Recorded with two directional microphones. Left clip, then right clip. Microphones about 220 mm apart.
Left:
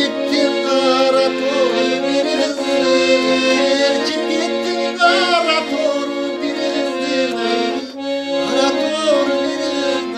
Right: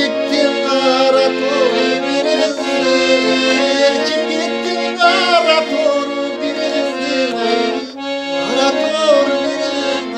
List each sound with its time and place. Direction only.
0.4 s music: 5° right (ahead or behind)
2.9 s accordion: 15° right (ahead or behind)
3.6 s music: 5° right (ahead or behind)
5.0 s music: 5° right (ahead or behind)
8.5 s music: 5° right (ahead or behind)